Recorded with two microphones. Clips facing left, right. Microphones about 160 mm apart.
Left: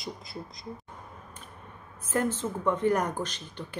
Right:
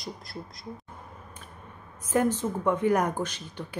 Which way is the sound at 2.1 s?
15° right (ahead or behind).